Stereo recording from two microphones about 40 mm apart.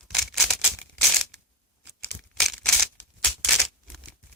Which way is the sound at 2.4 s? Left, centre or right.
Centre.